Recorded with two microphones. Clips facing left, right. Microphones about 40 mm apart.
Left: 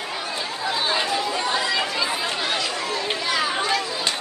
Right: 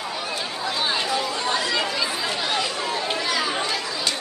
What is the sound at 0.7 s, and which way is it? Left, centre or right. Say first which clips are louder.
Chatter: left 1 dB; centre.